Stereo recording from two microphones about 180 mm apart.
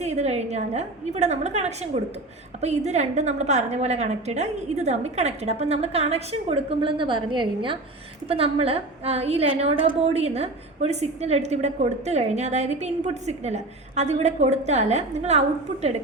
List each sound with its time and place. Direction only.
0.0 s a woman's voice: 35° right (ahead or behind)